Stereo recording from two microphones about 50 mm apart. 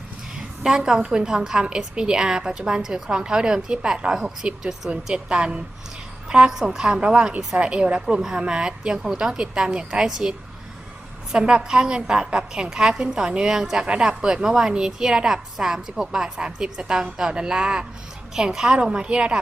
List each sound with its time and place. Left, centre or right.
0.6 s a woman's voice: centre
6.2 s a sound: centre
6.5 s a woman's voice: centre